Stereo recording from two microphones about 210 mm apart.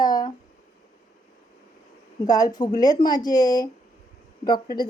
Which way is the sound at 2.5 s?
20° left (ahead or behind).